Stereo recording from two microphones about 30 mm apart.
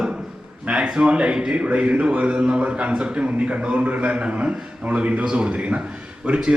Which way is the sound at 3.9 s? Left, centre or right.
Right.